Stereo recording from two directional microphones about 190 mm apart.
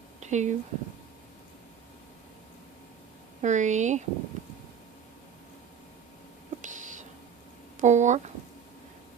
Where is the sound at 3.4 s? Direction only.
40° right (ahead or behind).